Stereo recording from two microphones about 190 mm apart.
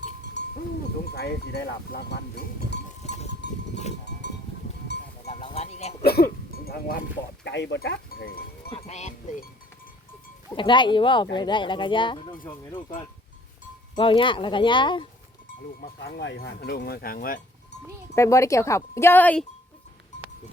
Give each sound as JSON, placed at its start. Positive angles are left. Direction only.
{"t": 1.0, "sound": "speech", "side_deg": 60}
{"t": 3.0, "sound": "goat", "side_deg": 35}
{"t": 5.2, "sound": "a sound", "side_deg": 35}
{"t": 6.0, "sound": "sheep", "side_deg": 55}
{"t": 7.4, "sound": "speech", "side_deg": 65}
{"t": 8.7, "sound": "speech", "side_deg": 35}
{"t": 10.5, "sound": "speech", "side_deg": 25}
{"t": 13.9, "sound": "speech", "side_deg": 25}
{"t": 15.8, "sound": "speech", "side_deg": 55}
{"t": 18.1, "sound": "speech", "side_deg": 15}